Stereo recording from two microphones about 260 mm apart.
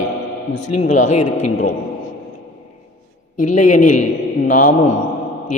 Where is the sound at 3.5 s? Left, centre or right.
Left.